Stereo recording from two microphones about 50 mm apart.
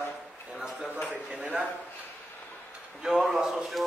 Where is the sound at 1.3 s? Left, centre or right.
Right.